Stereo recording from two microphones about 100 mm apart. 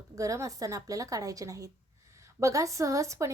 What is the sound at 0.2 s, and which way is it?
A woman's voice, 35° right (ahead or behind).